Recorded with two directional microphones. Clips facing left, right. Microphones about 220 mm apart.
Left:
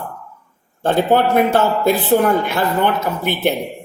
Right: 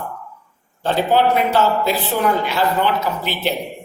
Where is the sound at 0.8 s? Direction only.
55° left (ahead or behind).